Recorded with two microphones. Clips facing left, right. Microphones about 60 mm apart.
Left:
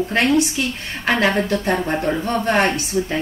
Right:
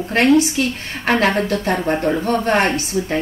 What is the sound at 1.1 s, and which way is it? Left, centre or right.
A woman's voice, right.